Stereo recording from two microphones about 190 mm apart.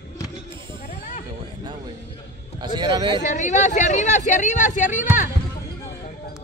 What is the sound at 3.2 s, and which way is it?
Speech, 40° left (ahead or behind).